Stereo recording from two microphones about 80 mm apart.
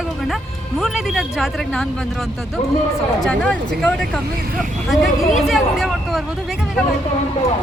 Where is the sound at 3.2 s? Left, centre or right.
Centre.